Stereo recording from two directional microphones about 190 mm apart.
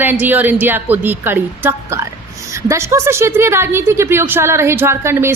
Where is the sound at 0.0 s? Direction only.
10° right (ahead or behind).